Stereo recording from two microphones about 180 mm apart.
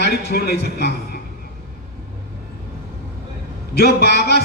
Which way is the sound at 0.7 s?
65° left (ahead or behind).